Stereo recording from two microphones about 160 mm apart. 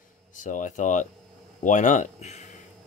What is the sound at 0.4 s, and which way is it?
Speech, 50° left (ahead or behind).